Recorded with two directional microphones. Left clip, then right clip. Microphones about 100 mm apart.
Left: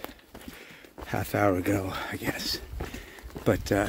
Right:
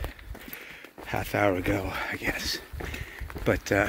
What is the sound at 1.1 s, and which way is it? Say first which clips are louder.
Speech: even; 80° left.